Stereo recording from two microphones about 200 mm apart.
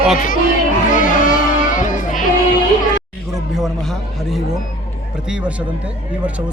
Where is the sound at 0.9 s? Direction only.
40° left (ahead or behind).